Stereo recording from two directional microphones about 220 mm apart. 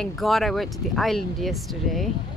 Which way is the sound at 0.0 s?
Centre (ahead or behind).